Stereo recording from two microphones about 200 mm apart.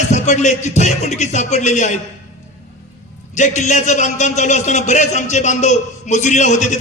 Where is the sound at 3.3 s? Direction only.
35° left (ahead or behind).